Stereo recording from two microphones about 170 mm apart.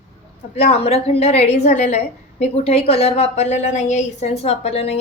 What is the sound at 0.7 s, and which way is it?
A woman's voice, 35° left (ahead or behind).